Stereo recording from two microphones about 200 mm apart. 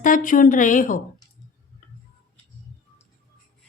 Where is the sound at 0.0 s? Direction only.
40° left (ahead or behind).